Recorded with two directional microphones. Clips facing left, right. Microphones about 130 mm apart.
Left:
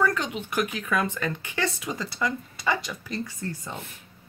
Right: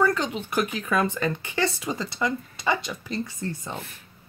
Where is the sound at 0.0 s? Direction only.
30° right (ahead or behind).